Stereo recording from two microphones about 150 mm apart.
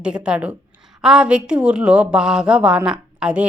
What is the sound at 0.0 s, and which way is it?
A woman's voice, 5° right (ahead or behind).